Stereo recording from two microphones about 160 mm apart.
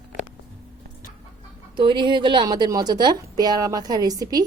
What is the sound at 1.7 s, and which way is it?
A woman's voice, 30° right (ahead or behind).